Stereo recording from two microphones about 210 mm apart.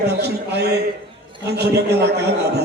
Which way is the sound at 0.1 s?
50° right (ahead or behind).